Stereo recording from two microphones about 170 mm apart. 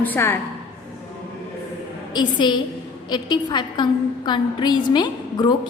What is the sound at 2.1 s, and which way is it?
A woman's voice, 25° left (ahead or behind).